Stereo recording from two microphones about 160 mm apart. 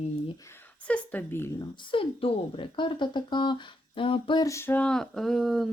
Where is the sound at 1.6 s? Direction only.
35° left (ahead or behind).